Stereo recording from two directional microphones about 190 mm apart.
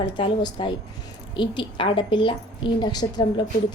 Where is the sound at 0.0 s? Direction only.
25° left (ahead or behind).